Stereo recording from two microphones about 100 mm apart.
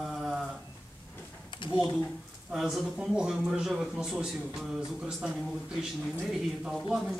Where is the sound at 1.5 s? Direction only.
55° left (ahead or behind).